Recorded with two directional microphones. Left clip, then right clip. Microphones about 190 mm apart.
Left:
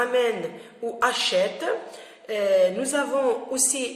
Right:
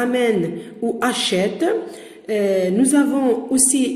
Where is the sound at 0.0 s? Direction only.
25° right (ahead or behind).